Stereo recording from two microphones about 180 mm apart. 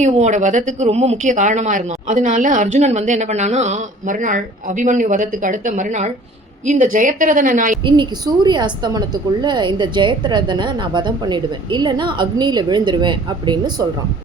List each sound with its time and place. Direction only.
0.0 s speech: 40° right (ahead or behind)
8.4 s a woman's voice: 25° right (ahead or behind)